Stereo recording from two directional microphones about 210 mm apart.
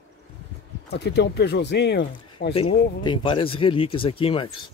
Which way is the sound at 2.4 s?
40° left (ahead or behind).